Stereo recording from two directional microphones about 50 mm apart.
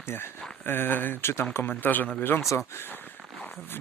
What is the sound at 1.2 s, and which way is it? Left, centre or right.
Speech, left.